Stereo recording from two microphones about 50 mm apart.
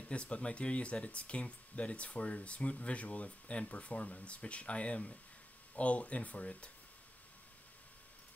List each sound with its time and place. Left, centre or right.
0.1 s speech: left